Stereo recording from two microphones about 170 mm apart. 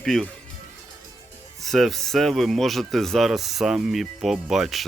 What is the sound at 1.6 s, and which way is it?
Speech, centre (ahead or behind).